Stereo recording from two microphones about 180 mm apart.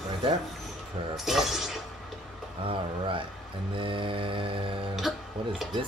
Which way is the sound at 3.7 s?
30° right (ahead or behind).